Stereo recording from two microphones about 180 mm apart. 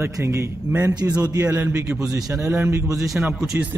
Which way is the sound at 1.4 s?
10° right (ahead or behind).